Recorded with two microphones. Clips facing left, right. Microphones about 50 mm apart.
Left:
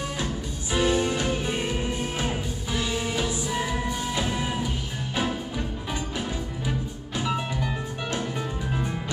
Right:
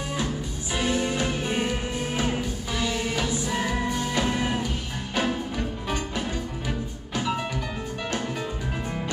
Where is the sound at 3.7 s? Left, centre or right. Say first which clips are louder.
Right 2 dB; right.